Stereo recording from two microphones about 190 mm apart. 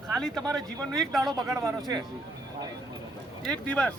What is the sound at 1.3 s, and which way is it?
Speech, 20° right (ahead or behind).